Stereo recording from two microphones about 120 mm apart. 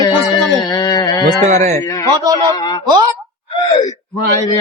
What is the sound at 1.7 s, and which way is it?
Mantra, 25° left (ahead or behind).